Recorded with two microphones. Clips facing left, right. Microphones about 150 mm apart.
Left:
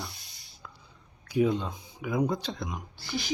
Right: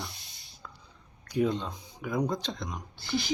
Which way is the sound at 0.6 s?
5° left (ahead or behind).